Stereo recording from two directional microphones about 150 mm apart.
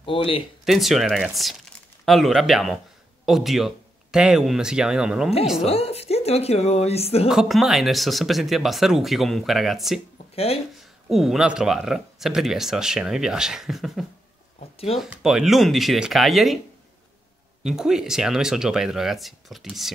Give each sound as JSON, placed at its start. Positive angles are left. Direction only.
{"t": 0.0, "sound": "speech", "side_deg": 35}
{"t": 0.7, "sound": "speech", "side_deg": 0}
{"t": 5.7, "sound": "speech", "side_deg": 45}
{"t": 7.2, "sound": "speech", "side_deg": 0}
{"t": 10.1, "sound": "a sound", "side_deg": 40}
{"t": 10.8, "sound": "speech", "side_deg": 0}
{"t": 14.6, "sound": "a sound", "side_deg": 40}
{"t": 15.0, "sound": "speech", "side_deg": -5}
{"t": 17.6, "sound": "speech", "side_deg": -5}